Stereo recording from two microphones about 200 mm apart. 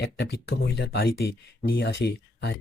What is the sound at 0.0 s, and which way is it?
Speech, 55° left (ahead or behind).